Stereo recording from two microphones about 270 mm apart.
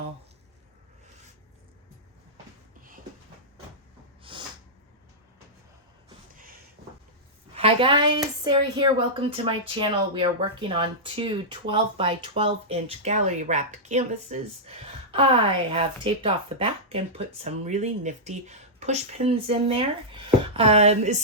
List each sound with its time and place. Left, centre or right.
4.2 s snort: centre
6.3 s a sound: right
7.5 s a woman's voice: centre